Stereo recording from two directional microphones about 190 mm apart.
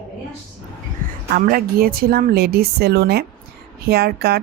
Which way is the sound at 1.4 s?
50° right (ahead or behind).